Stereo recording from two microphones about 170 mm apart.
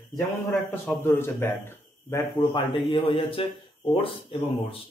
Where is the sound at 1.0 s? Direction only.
15° left (ahead or behind).